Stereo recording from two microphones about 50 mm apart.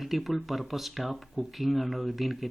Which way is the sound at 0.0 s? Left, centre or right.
Centre.